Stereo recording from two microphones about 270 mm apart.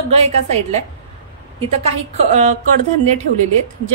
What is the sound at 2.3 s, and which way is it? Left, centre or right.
Speech, right.